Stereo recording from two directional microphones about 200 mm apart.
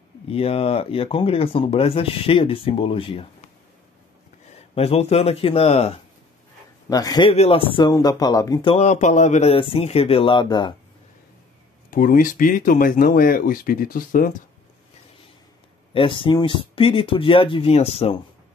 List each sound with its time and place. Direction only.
0.3 s speech: 30° left (ahead or behind)
4.7 s speech: 30° left (ahead or behind)
6.9 s speech: 20° left (ahead or behind)
8.7 s speech: 35° left (ahead or behind)
11.9 s speech: 45° left (ahead or behind)
15.9 s speech: 25° left (ahead or behind)